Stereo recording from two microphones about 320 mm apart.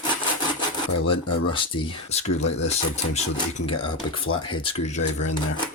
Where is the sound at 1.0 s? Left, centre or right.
Centre.